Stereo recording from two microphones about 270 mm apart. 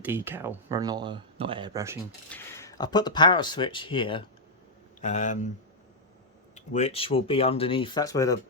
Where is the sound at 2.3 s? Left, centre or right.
Centre; by 5.5 s left.